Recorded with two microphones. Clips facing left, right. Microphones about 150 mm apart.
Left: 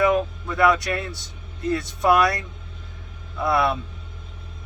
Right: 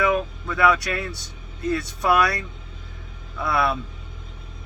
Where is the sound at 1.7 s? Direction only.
20° left (ahead or behind).